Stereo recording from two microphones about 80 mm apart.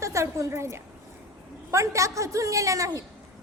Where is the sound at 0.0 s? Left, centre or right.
Right.